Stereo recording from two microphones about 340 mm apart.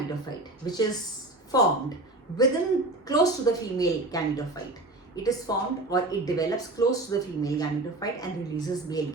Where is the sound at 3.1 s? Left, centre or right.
Centre.